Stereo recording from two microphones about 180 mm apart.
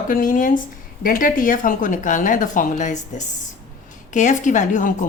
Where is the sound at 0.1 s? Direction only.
50° left (ahead or behind).